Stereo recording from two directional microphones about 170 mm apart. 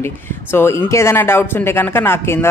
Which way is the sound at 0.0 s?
15° left (ahead or behind).